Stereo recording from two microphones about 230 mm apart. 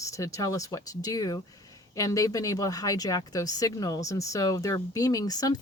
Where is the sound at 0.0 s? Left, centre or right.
Centre.